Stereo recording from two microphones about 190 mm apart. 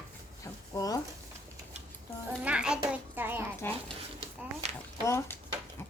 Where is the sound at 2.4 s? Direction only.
5° right (ahead or behind).